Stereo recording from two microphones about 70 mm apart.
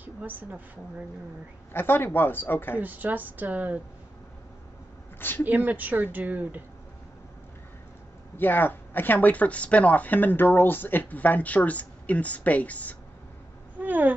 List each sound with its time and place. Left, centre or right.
0.0 s a woman's voice: right
1.7 s speech: left
2.8 s a woman's voice: right
5.4 s a woman's voice: right
8.4 s speech: left
13.7 s cat: right